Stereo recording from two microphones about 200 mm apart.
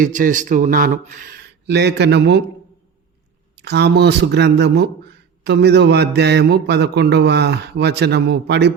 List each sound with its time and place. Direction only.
0.0 s speech: 40° right (ahead or behind); by 2.4 s 60° right (ahead or behind)
3.6 s mantra: 55° right (ahead or behind)